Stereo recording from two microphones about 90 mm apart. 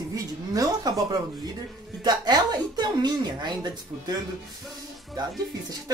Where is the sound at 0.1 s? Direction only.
40° right (ahead or behind).